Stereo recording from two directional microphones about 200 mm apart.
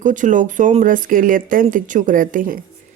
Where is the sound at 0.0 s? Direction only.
40° right (ahead or behind).